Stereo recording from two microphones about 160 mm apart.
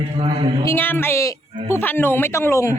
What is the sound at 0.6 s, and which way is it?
Speech, 15° left (ahead or behind).